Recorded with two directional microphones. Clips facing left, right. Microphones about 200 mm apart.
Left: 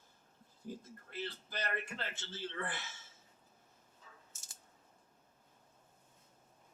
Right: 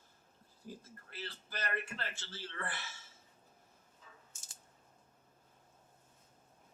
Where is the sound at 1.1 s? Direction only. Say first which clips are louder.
Left 3 dB; 15° left (ahead or behind).